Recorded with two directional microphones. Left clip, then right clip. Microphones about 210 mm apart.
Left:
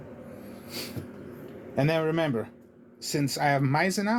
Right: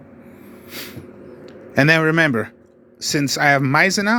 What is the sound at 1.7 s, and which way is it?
Speech, 40° right (ahead or behind).